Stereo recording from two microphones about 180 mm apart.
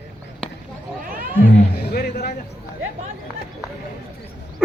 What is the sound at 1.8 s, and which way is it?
Speech, 65° left (ahead or behind).